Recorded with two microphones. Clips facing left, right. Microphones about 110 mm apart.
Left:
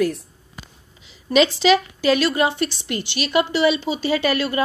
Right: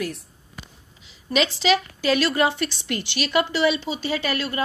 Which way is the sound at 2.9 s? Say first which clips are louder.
Left 2 dB; 30° left (ahead or behind).